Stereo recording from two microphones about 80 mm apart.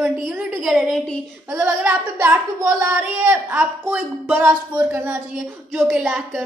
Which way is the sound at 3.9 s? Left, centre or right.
Right.